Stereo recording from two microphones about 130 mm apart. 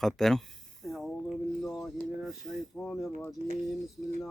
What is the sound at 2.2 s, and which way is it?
Speech, centre (ahead or behind).